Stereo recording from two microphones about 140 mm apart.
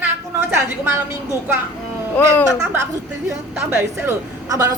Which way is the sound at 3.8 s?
20° right (ahead or behind).